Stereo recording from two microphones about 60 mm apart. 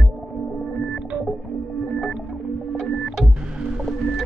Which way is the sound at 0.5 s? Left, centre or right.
Centre.